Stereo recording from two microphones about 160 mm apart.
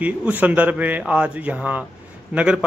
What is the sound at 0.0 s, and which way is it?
A man's voice, 10° right (ahead or behind).